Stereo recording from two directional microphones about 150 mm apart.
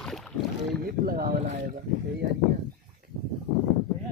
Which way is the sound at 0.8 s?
75° right (ahead or behind).